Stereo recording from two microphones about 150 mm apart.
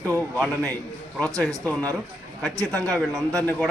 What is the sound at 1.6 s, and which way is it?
Speech, 10° left (ahead or behind).